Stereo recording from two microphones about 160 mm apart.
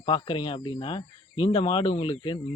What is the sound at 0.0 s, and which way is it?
Speech, 30° left (ahead or behind).